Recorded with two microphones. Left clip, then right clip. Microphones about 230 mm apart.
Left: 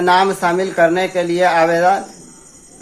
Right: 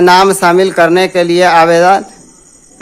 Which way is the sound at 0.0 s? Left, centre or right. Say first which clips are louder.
Right 7 dB; right.